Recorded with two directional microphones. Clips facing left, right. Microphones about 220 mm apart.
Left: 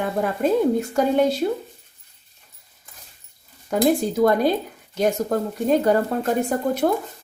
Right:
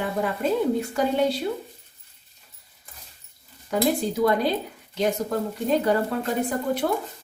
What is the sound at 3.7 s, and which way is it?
Speech, 50° left (ahead or behind).